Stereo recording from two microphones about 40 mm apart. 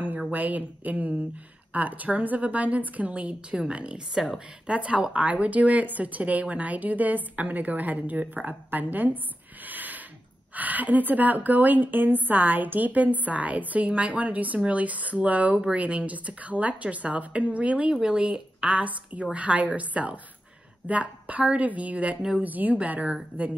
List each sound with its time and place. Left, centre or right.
0.3 s a woman's voice: right
4.1 s speech: centre
4.6 s a woman's voice: right
9.7 s a sound: right
10.5 s a woman's voice: right